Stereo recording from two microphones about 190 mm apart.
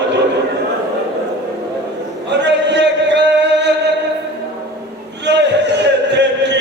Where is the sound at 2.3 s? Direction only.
65° right (ahead or behind).